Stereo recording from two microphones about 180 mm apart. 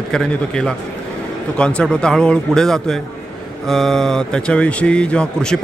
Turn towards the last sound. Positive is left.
turn(degrees=5)  # may be behind; listen again after turning